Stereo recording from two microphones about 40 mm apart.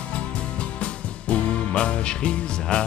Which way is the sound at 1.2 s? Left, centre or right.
Left.